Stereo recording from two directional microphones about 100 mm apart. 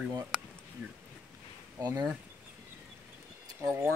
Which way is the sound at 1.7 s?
40° right (ahead or behind).